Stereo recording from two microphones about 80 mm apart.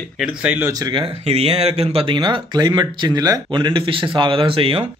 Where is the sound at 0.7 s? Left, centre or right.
Right.